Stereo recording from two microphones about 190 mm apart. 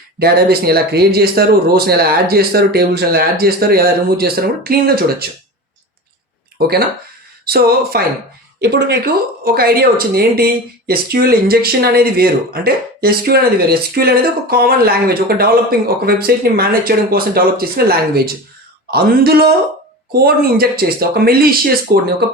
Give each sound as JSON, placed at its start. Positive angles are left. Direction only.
{"t": 0.2, "sound": "a man's voice", "side_deg": -55}
{"t": 6.6, "sound": "a man's voice", "side_deg": -55}